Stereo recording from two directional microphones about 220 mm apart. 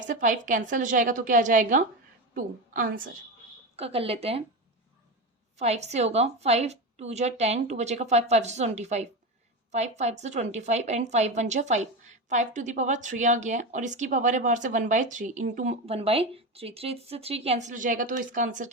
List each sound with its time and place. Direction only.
0.1 s a woman's voice: 35° right (ahead or behind)
3.8 s a woman's voice: 25° right (ahead or behind)
5.5 s a woman's voice: 30° right (ahead or behind)